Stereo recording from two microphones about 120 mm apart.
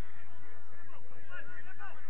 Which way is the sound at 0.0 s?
10° left (ahead or behind).